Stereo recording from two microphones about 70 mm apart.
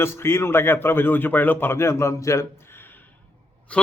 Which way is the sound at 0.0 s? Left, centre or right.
Left.